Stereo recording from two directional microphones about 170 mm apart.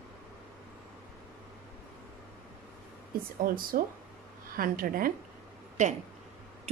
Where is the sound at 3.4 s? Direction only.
55° right (ahead or behind).